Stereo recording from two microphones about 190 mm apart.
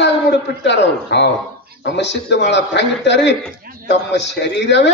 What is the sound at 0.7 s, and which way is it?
A man's voice, 65° left (ahead or behind).